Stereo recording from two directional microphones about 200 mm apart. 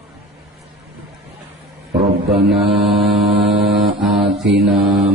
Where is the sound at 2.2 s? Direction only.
Centre (ahead or behind).